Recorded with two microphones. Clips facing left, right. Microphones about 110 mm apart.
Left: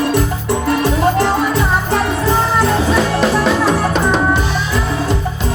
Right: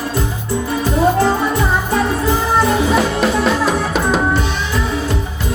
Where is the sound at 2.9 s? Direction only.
5° right (ahead or behind).